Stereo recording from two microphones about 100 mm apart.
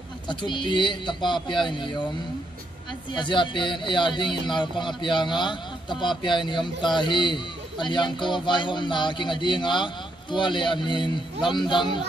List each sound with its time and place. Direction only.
0.3 s speech: 50° left (ahead or behind)